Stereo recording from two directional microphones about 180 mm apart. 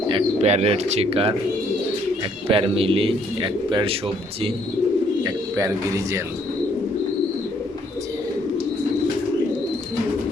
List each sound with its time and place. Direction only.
0.1 s speech: 35° right (ahead or behind)
2.5 s speech: 30° right (ahead or behind)
5.2 s speech: 15° right (ahead or behind)